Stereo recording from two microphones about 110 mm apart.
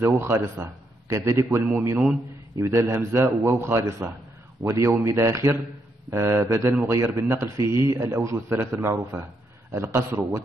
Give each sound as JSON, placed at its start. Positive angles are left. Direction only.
{"t": 0.0, "sound": "a man's voice", "side_deg": -25}